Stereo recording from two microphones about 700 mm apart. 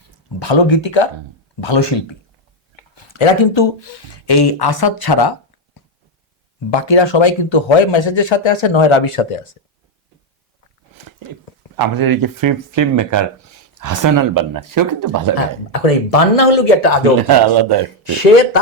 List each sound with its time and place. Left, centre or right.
0.3 s a man's voice: left
6.7 s a man's voice: left
11.8 s speech: right
15.7 s speech: left
17.2 s a man's voice: right
18.0 s speech: left